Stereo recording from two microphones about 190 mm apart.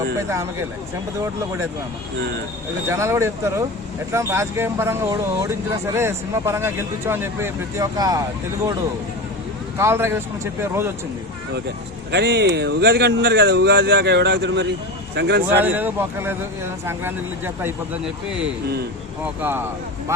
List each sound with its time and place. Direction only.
0.2 s speech: 15° right (ahead or behind)
2.9 s speech: 15° right (ahead or behind)
9.7 s speech: 15° right (ahead or behind)
12.1 s speech: 60° right (ahead or behind)
15.6 s speech: 10° right (ahead or behind)